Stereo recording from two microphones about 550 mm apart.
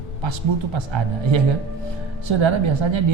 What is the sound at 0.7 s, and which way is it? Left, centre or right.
Speech, right.